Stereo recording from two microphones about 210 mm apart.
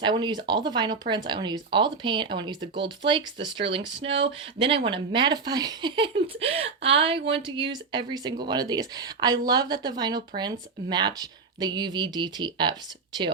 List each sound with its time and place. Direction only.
0.0 s speech: 20° right (ahead or behind)